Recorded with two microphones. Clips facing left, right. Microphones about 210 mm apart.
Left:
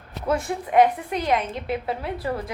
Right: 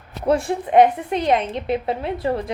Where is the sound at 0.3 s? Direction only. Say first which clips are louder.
Right 5 dB; 30° right (ahead or behind).